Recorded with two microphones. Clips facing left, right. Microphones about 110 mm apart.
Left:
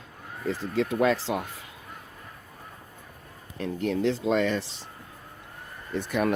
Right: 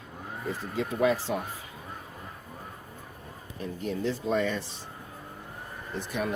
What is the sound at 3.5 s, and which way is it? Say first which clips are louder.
Speech: left 5 dB; 90° left.